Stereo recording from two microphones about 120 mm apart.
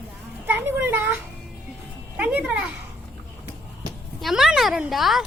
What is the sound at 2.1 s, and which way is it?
Speech, 10° right (ahead or behind).